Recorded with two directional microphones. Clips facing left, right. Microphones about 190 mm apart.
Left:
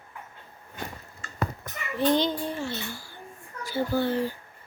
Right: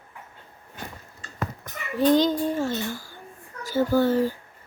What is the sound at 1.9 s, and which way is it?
A child's voice, 40° right (ahead or behind).